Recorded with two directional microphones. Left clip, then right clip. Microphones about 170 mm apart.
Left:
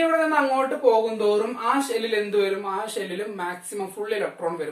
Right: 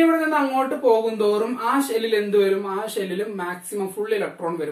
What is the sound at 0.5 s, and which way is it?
Speech, 15° left (ahead or behind).